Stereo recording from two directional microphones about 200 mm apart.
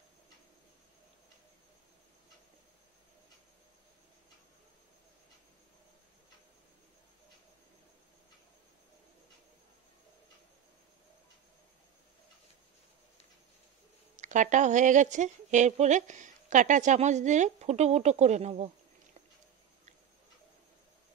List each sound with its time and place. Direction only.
14.1 s a woman's voice: 40° right (ahead or behind)